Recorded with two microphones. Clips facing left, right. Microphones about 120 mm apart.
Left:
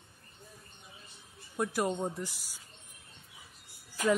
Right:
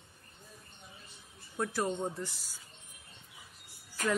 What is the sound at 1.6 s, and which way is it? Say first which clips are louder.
Speech: left 2 dB; 15° left (ahead or behind).